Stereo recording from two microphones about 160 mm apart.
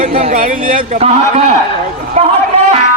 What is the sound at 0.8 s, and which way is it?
Speech, 40° right (ahead or behind).